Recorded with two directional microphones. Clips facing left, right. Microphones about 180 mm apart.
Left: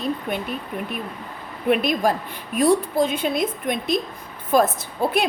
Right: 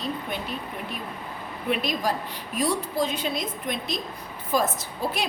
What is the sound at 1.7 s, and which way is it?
A woman's voice, 55° left (ahead or behind).